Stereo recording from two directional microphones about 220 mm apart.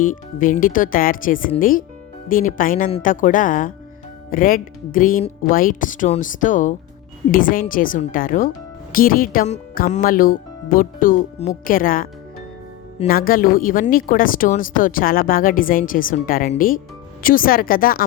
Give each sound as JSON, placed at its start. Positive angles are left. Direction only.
{"t": 0.0, "sound": "speech", "side_deg": 35}